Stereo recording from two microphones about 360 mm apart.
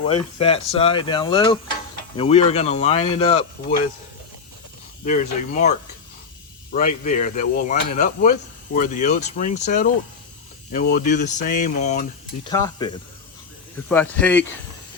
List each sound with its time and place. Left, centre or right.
0.0 s speech: centre
5.0 s speech: left
6.7 s speech: left; by 14.5 s centre